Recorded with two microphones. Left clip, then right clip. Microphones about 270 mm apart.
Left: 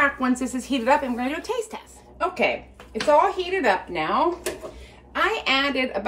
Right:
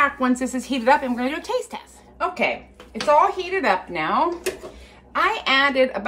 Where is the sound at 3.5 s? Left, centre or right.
Centre.